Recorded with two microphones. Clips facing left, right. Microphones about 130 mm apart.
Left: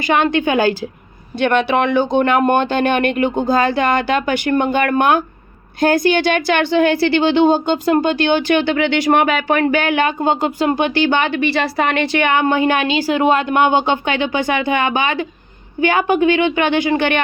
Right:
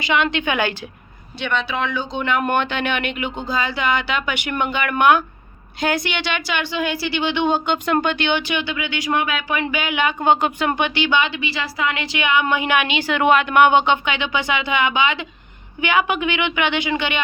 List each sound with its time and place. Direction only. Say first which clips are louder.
0.0 s a woman's voice: left 5 dB; 50° left (ahead or behind); by 0.9 s 30° left (ahead or behind)
1.4 s speech: left 8 dB; 55° left (ahead or behind)
2.4 s a woman's voice: left 6 dB; 40° left (ahead or behind)
8.4 s speech: left 9 dB; 55° left (ahead or behind)
10.2 s a woman's voice: left 1 dB; 35° left (ahead or behind)
14.2 s speech: left 5 dB; 45° left (ahead or behind)